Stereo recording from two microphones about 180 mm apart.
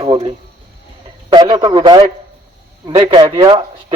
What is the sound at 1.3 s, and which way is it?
A man's voice, 25° right (ahead or behind).